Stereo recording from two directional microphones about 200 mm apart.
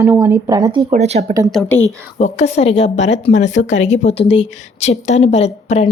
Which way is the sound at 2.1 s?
35° left (ahead or behind).